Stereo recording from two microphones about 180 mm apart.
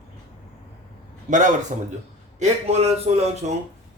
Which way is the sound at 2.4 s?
35° right (ahead or behind).